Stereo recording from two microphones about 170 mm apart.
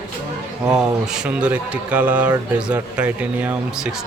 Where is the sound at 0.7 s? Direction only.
5° right (ahead or behind).